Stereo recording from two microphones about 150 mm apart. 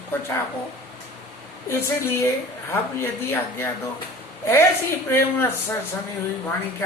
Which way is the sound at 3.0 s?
15° left (ahead or behind).